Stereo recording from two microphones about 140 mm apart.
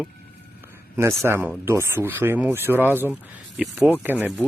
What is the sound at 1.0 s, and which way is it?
Speech, 15° right (ahead or behind).